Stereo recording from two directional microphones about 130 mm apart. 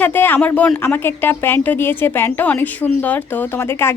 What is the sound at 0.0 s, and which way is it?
A woman's voice, 15° left (ahead or behind).